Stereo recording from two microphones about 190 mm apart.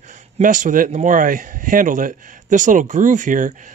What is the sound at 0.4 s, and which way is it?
A man's voice, 45° right (ahead or behind).